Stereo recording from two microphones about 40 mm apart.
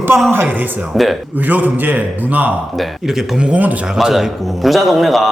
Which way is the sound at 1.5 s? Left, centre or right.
Right.